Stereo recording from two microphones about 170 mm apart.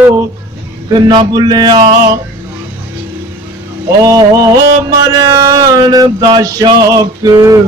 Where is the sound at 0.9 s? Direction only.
25° right (ahead or behind).